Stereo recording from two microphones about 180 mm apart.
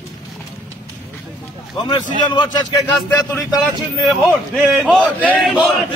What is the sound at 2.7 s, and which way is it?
A man's voice, centre (ahead or behind).